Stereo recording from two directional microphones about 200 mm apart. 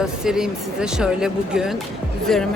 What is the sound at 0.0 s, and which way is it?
Speech, 5° right (ahead or behind).